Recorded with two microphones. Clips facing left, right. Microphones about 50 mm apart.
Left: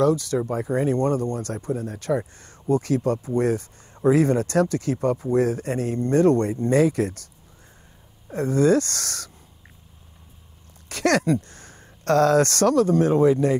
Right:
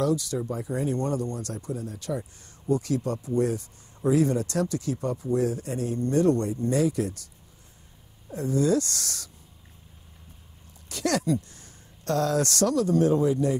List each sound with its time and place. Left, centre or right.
0.0 s speech: left
8.3 s speech: left
10.9 s speech: left